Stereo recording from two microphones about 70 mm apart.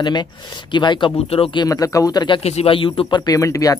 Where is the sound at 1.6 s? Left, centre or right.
Left.